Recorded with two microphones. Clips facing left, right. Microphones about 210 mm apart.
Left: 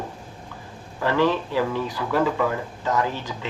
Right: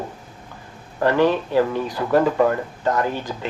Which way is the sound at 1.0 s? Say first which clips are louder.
Right 4 dB; 45° right (ahead or behind).